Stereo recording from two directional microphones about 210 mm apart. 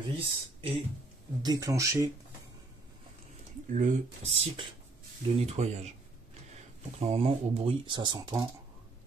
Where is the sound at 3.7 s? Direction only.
30° right (ahead or behind).